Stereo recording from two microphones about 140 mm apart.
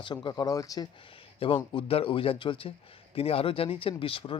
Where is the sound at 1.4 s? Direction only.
40° left (ahead or behind).